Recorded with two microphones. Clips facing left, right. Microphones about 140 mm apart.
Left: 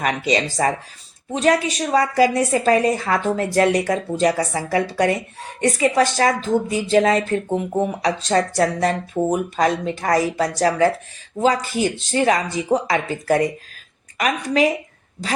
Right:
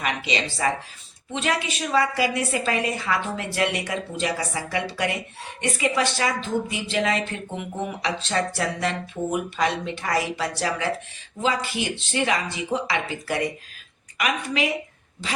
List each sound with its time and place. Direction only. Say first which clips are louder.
0.0 s a woman's voice: left 6 dB; 45° left (ahead or behind)